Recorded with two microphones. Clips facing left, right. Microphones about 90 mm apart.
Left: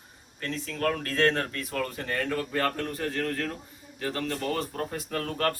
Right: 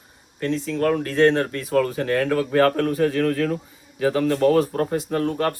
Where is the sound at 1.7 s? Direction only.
90° right.